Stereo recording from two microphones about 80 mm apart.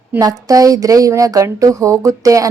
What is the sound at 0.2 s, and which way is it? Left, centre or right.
A woman's voice, right.